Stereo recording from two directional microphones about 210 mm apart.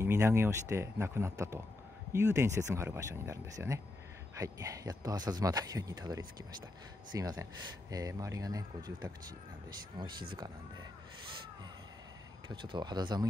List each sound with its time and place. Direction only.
0.0 s speech: 10° right (ahead or behind)
12.4 s speech: 20° right (ahead or behind)